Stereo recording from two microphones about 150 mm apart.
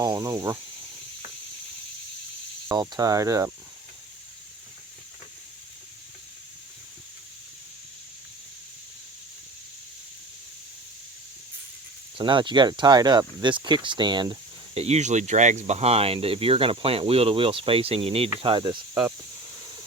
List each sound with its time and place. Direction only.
0.0 s speech: 20° right (ahead or behind)
2.6 s speech: 25° right (ahead or behind)
12.1 s speech: 30° right (ahead or behind)
14.8 s speech: 45° right (ahead or behind)